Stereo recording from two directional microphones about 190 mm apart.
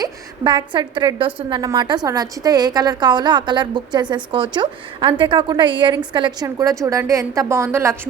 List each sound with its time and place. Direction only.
0.0 s a woman's voice: 25° right (ahead or behind)